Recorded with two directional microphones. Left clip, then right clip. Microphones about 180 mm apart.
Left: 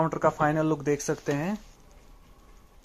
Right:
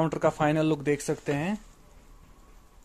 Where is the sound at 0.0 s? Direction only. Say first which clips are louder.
Left 1 dB; 20° right (ahead or behind).